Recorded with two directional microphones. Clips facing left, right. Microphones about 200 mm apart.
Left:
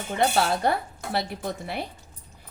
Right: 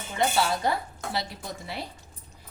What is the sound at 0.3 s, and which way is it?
A woman's voice, 60° left (ahead or behind).